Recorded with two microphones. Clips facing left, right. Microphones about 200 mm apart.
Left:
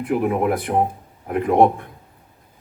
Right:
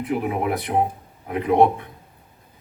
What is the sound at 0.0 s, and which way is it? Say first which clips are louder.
Speech: left 4 dB; 50° left (ahead or behind).